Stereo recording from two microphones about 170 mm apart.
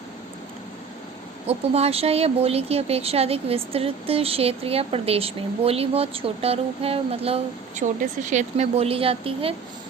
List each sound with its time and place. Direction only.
1.5 s speech: 35° right (ahead or behind)